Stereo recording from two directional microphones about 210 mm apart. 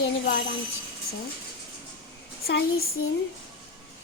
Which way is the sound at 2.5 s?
50° left (ahead or behind).